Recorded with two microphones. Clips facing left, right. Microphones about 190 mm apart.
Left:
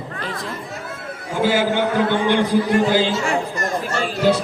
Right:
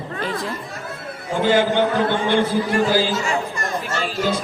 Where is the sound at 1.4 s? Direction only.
10° left (ahead or behind).